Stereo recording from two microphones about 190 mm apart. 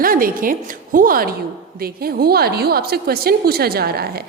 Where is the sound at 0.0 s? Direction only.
50° right (ahead or behind).